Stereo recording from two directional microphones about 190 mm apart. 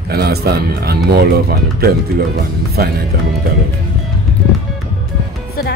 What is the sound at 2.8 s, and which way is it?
Speech, 55° right (ahead or behind).